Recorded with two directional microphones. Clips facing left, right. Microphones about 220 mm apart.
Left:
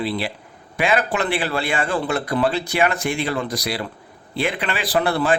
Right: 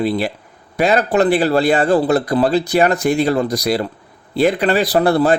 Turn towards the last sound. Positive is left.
turn(degrees=-40)  # may be behind; listen again after turning